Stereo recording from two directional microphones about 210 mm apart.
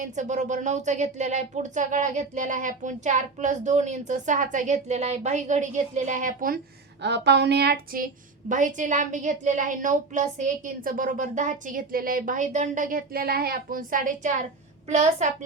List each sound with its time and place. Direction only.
0.0 s a woman's voice: 35° right (ahead or behind)
7.0 s a woman's voice: 55° right (ahead or behind); by 15.3 s 35° right (ahead or behind)